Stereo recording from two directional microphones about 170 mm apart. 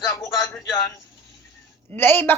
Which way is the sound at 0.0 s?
20° left (ahead or behind).